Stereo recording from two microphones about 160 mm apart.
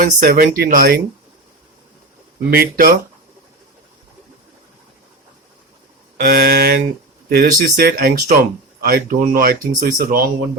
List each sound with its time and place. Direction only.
0.0 s speech: 65° right (ahead or behind)
2.5 s speech: 70° right (ahead or behind)
6.1 s speech: 65° right (ahead or behind)